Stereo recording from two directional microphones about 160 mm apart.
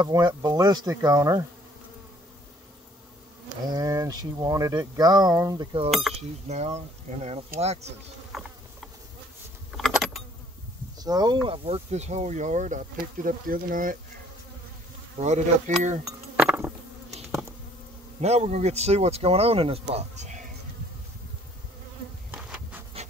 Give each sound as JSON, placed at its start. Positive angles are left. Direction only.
{"t": 0.0, "sound": "speech", "side_deg": -25}
{"t": 3.6, "sound": "speech", "side_deg": -20}
{"t": 5.9, "sound": "speech", "side_deg": 0}
{"t": 6.4, "sound": "speech", "side_deg": -45}
{"t": 8.3, "sound": "speech", "side_deg": 0}
{"t": 9.7, "sound": "keys jangling", "side_deg": 0}
{"t": 11.0, "sound": "speech", "side_deg": -25}
{"t": 15.1, "sound": "speech", "side_deg": -45}
{"t": 16.0, "sound": "chink", "side_deg": -20}
{"t": 18.2, "sound": "speech", "side_deg": -45}
{"t": 22.3, "sound": "insect", "side_deg": -10}